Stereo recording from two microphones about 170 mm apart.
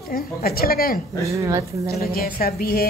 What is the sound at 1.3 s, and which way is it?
Speech, 20° right (ahead or behind).